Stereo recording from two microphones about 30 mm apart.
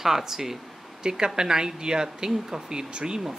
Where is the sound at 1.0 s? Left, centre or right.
Right.